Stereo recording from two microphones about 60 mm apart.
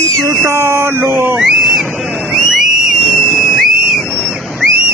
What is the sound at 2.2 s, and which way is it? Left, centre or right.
Whistle, centre.